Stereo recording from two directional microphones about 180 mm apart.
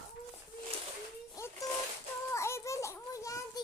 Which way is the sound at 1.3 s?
15° left (ahead or behind).